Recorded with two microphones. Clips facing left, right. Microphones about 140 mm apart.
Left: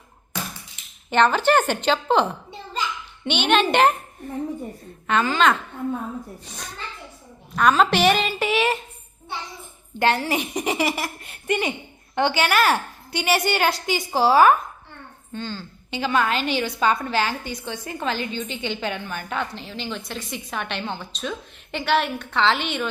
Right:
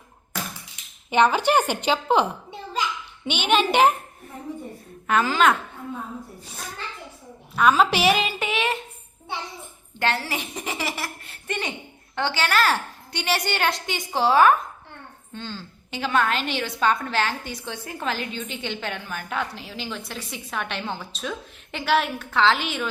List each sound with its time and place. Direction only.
1.1 s a child's voice: 10° right (ahead or behind)
10.0 s a child's voice: 15° left (ahead or behind); by 22.9 s centre (ahead or behind)